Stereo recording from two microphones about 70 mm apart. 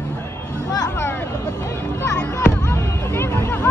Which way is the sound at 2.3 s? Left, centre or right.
Left.